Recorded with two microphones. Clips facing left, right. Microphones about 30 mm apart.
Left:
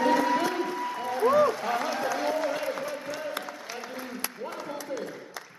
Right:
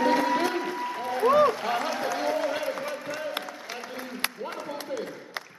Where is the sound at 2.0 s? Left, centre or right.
Centre.